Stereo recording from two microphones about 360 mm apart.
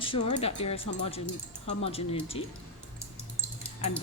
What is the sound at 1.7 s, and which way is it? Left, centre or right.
Speech, centre.